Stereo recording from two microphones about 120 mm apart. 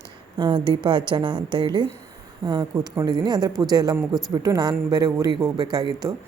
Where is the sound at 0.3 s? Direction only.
40° right (ahead or behind).